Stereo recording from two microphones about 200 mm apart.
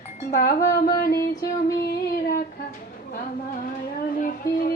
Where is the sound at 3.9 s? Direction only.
45° left (ahead or behind).